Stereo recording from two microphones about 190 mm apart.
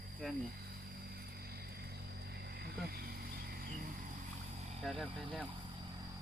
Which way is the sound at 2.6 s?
55° right (ahead or behind).